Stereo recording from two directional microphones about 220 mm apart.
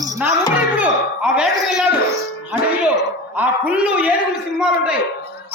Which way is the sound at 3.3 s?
5° right (ahead or behind).